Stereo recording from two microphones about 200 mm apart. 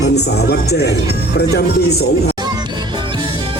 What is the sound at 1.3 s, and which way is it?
Speech, 55° left (ahead or behind).